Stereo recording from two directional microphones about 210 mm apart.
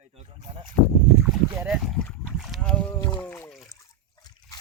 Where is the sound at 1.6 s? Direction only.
Centre (ahead or behind).